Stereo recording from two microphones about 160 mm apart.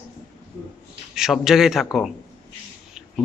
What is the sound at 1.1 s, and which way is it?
Speech, centre (ahead or behind).